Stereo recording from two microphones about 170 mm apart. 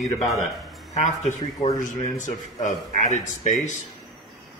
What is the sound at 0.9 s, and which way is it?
Speech, 40° left (ahead or behind).